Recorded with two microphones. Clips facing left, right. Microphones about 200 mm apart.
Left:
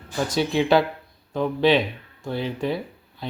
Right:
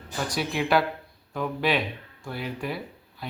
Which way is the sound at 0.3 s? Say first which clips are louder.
Left 6 dB; 25° left (ahead or behind).